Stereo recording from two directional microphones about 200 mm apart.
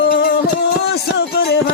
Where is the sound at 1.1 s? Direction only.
55° left (ahead or behind).